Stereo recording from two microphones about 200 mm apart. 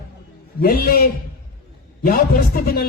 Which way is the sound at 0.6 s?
45° left (ahead or behind).